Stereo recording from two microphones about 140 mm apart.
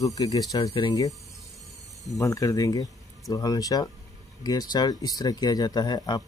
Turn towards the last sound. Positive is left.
turn(degrees=30)  # may be behind; listen again after turning